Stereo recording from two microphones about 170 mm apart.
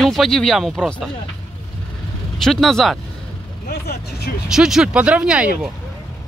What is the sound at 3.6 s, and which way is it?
Speech, 70° left (ahead or behind).